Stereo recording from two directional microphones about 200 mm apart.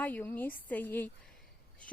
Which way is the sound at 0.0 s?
10° left (ahead or behind).